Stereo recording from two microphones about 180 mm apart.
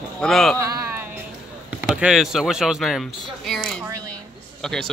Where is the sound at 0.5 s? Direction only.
15° right (ahead or behind).